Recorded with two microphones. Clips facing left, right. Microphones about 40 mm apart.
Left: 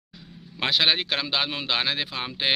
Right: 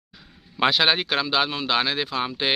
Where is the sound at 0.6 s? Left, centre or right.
Centre.